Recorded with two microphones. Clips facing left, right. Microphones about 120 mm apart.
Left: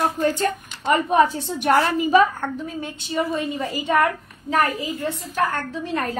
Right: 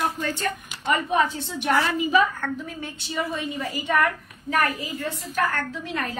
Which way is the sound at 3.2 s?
35° left (ahead or behind).